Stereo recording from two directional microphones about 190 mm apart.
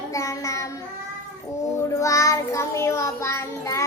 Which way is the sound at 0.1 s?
15° left (ahead or behind).